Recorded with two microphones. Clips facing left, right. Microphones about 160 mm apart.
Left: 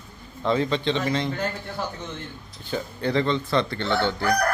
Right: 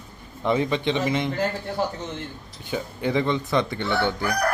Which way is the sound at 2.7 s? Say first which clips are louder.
Even; 15° right (ahead or behind).